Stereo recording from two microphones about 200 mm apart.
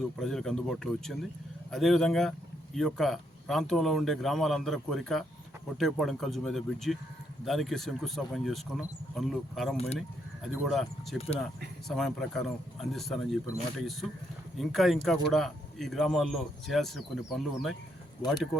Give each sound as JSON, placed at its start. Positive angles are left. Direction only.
{"t": 0.2, "sound": "speech", "side_deg": 0}